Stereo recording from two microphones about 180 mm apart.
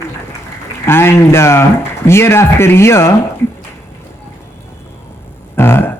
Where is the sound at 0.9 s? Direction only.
15° left (ahead or behind).